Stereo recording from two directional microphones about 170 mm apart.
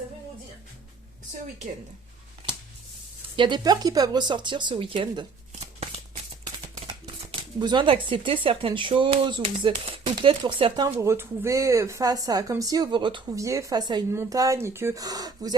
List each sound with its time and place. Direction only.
3.3 s speech: 25° right (ahead or behind)
10.9 s speech: 15° right (ahead or behind)